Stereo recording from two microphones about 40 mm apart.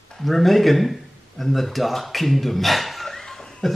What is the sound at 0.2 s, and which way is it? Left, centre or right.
Speech, centre.